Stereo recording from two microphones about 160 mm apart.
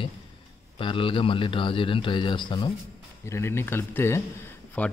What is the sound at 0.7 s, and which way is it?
A man's voice, 35° left (ahead or behind).